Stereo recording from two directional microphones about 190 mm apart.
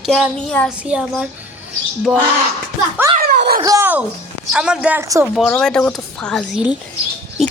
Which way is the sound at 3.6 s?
15° right (ahead or behind).